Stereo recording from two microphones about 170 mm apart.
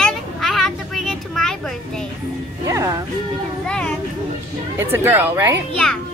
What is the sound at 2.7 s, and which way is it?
Music, 20° right (ahead or behind).